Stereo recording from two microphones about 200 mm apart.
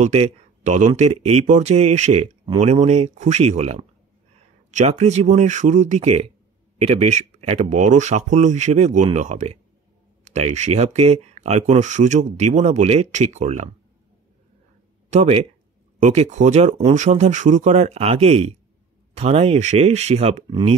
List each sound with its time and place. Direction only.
0.0 s speech: 35° right (ahead or behind)
15.0 s speech: 30° right (ahead or behind)